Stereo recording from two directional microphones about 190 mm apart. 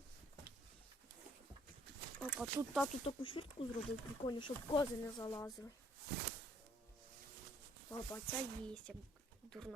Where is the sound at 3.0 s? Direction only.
30° left (ahead or behind).